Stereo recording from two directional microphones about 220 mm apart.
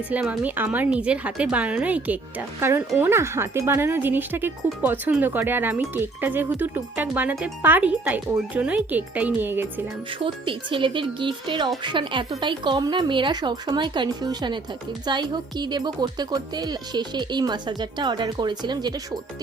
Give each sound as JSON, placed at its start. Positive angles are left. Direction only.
{"t": 0.1, "sound": "speech", "side_deg": -5}
{"t": 10.2, "sound": "a woman's voice", "side_deg": -25}